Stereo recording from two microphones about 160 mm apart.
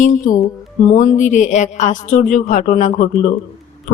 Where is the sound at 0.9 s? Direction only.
50° left (ahead or behind).